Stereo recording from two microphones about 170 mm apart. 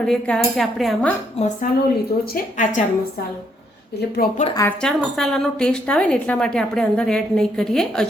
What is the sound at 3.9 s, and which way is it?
Speech, 70° left (ahead or behind).